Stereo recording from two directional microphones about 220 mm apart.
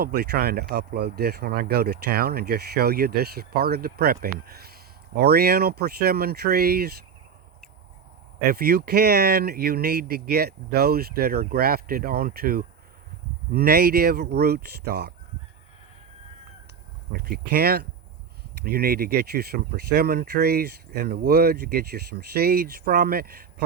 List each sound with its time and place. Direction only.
0.0 s speech: 45° right (ahead or behind)
8.4 s speech: 45° right (ahead or behind)
17.1 s speech: 45° right (ahead or behind)